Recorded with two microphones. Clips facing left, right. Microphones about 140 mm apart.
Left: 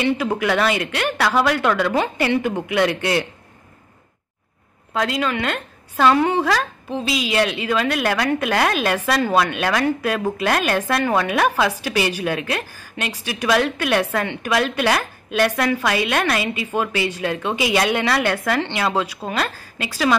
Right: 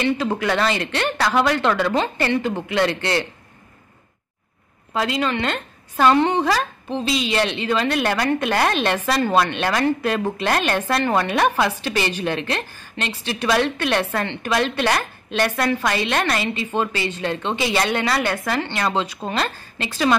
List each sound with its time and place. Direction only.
0.0 s a woman's voice: 10° left (ahead or behind)
4.9 s a woman's voice: centre (ahead or behind)